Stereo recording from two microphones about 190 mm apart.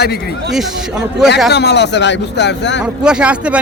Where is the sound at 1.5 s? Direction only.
60° left (ahead or behind).